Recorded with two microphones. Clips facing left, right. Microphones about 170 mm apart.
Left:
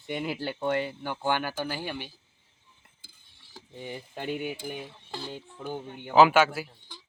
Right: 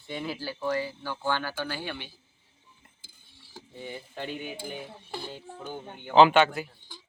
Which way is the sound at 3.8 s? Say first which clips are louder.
Left 2 dB; 15° left (ahead or behind).